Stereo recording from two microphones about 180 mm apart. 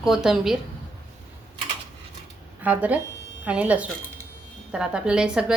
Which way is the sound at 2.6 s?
10° right (ahead or behind).